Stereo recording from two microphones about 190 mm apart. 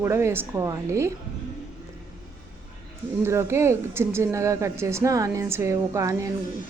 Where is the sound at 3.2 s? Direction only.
15° right (ahead or behind).